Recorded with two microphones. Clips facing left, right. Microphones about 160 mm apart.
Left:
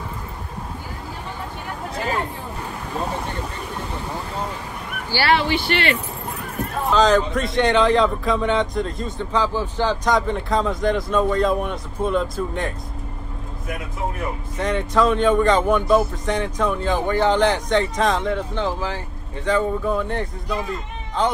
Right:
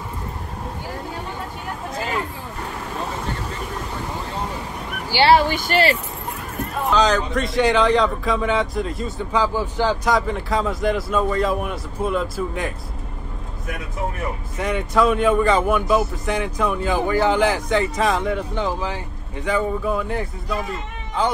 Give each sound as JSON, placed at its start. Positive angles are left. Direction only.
{"t": 5.3, "sound": "speech", "side_deg": -45}
{"t": 6.9, "sound": "a man's voice", "side_deg": 0}
{"t": 14.6, "sound": "a man's voice", "side_deg": -10}